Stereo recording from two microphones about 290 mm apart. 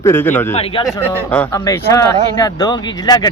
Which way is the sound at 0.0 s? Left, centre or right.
Centre.